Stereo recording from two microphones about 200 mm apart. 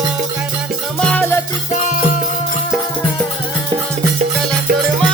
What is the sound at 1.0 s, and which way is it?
Music, 5° left (ahead or behind).